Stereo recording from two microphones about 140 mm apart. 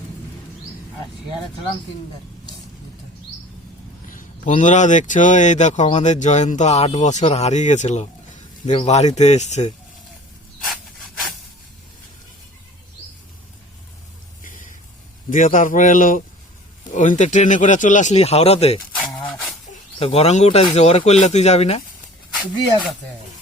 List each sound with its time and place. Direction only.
4.1 s speech: 70° left (ahead or behind)
10.7 s wood: centre (ahead or behind)
14.4 s a sound: 75° left (ahead or behind)
15.3 s speech: 70° left (ahead or behind)
16.9 s speech: 60° left (ahead or behind)
20.0 s speech: 45° left (ahead or behind)